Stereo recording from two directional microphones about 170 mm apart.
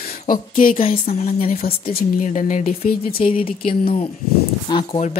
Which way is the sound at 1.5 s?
60° left (ahead or behind).